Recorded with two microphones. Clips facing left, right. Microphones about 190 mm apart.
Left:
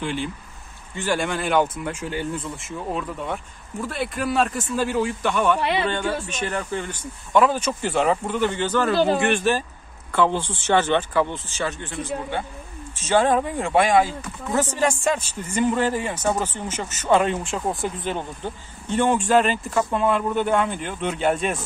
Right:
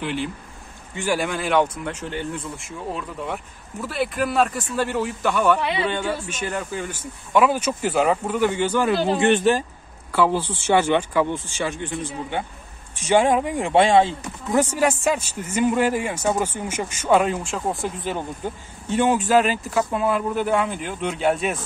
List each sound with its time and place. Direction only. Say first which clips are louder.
0.0 s a man's voice: right 1 dB; 5° right (ahead or behind); by 14.6 s 25° right (ahead or behind)
14.6 s a man's voice: right 2 dB; 10° right (ahead or behind)